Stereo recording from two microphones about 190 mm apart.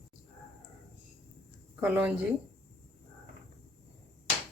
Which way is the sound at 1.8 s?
5° right (ahead or behind).